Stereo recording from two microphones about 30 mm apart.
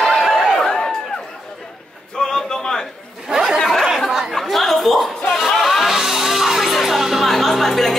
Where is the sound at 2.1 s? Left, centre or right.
Centre.